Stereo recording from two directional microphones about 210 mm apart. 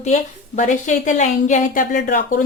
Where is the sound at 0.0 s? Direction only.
35° left (ahead or behind).